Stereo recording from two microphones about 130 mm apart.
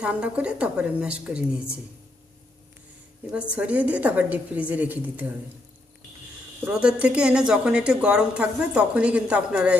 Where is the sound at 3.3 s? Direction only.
10° right (ahead or behind).